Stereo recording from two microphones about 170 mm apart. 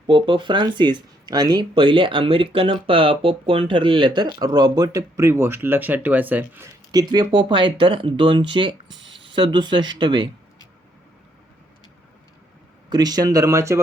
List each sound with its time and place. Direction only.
0.1 s speech: 30° right (ahead or behind)
8.9 s a sound: 90° right
9.2 s speech: 30° right (ahead or behind)
12.9 s speech: 20° right (ahead or behind)